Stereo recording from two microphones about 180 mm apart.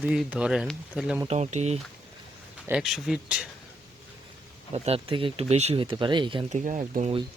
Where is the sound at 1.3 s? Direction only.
40° right (ahead or behind).